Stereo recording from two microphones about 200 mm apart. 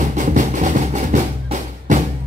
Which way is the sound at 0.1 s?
40° right (ahead or behind).